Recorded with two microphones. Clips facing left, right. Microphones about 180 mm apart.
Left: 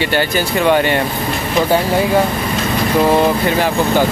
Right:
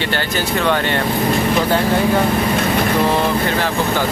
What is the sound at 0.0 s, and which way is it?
Speech, 10° left (ahead or behind).